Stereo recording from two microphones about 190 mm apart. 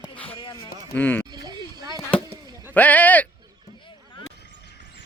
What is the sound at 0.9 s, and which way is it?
Speech, 10° left (ahead or behind).